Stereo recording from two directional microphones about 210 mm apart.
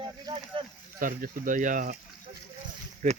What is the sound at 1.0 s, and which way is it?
Speech, 40° right (ahead or behind).